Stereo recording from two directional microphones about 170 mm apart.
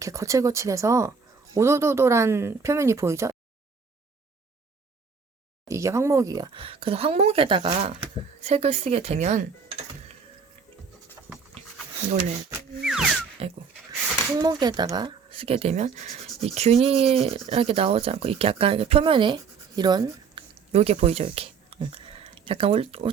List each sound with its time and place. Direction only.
0.0 s speech: 20° right (ahead or behind)
5.6 s speech: 15° right (ahead or behind); by 9.5 s 45° right (ahead or behind)
11.3 s pant: 10° right (ahead or behind)
12.8 s music: 5° right (ahead or behind)
13.4 s speech: 35° right (ahead or behind)
14.3 s speech: 25° right (ahead or behind)
20.7 s speech: 40° right (ahead or behind)